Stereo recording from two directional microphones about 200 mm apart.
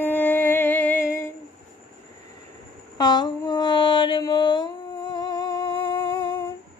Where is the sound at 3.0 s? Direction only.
20° left (ahead or behind).